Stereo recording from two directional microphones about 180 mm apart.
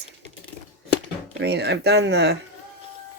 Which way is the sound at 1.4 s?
70° right (ahead or behind).